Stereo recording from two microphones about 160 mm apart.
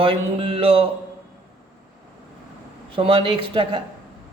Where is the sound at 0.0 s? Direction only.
35° right (ahead or behind).